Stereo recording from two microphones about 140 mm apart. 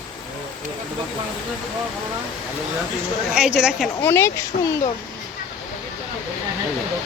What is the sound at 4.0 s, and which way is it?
Speech, 15° left (ahead or behind).